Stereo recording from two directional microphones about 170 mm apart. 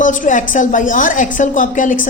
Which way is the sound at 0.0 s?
50° left (ahead or behind).